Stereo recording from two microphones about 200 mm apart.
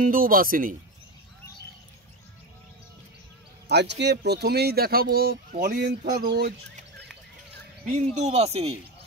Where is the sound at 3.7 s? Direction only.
60° right (ahead or behind).